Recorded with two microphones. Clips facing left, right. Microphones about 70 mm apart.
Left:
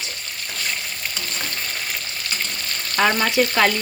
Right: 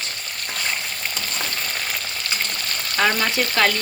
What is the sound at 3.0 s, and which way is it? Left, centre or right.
Speech, centre.